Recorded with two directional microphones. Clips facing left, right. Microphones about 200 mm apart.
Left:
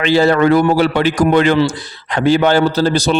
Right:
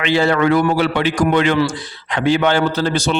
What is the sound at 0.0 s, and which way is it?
A man's voice, 40° left (ahead or behind).